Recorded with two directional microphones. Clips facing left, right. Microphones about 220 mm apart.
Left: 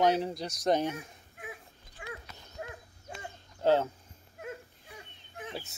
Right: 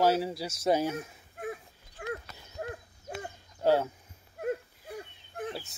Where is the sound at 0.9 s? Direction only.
40° right (ahead or behind).